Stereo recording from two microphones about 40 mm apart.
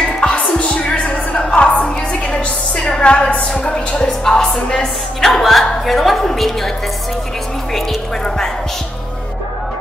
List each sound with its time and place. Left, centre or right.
0.3 s music: left
4.2 s speech: centre
5.2 s a woman's voice: centre